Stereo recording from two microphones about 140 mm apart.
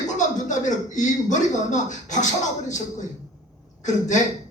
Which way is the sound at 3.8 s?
60° left (ahead or behind).